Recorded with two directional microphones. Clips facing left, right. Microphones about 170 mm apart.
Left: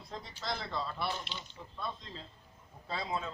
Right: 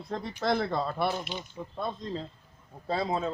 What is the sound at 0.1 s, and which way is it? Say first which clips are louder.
Speech: right 11 dB; 60° right (ahead or behind).